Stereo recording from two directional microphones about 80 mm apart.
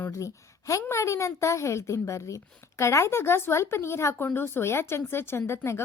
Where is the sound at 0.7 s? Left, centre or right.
Left.